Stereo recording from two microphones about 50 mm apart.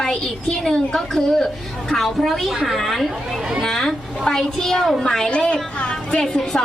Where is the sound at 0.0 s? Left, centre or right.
Centre.